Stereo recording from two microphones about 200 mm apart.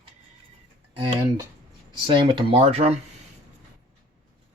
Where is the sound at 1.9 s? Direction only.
25° right (ahead or behind).